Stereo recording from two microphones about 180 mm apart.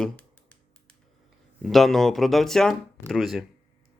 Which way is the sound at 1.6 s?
Centre (ahead or behind).